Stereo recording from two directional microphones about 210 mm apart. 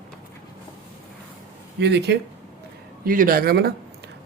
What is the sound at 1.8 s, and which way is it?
Speech, 55° right (ahead or behind).